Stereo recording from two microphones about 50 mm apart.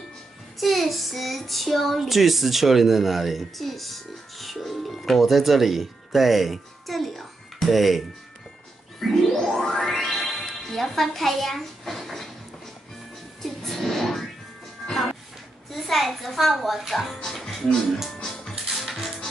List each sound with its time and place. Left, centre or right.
0.6 s child singing: centre
9.3 s music: centre
13.4 s television: centre
14.9 s music: centre
15.7 s child singing: centre
18.5 s music: centre